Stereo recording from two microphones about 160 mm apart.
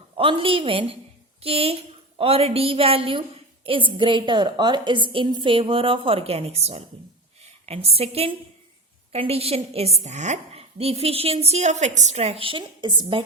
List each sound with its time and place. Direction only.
0.2 s a woman's voice: 35° right (ahead or behind)